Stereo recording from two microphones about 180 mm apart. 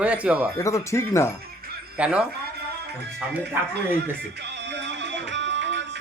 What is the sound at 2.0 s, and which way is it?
Speech, 5° right (ahead or behind).